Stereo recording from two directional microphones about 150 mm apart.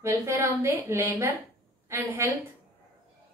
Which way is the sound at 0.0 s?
15° right (ahead or behind).